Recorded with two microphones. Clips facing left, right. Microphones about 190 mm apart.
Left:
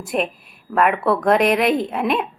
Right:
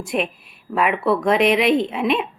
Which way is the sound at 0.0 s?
Centre (ahead or behind).